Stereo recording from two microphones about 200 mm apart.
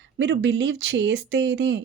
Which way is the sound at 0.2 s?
60° right (ahead or behind).